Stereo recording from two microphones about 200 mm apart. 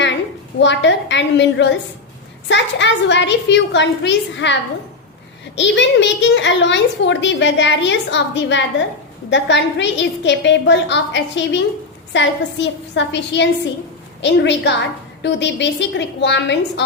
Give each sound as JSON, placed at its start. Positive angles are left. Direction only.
{"t": 0.6, "sound": "a woman's voice", "side_deg": 65}